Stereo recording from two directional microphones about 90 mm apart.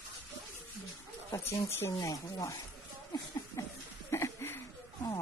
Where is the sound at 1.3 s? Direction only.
35° left (ahead or behind).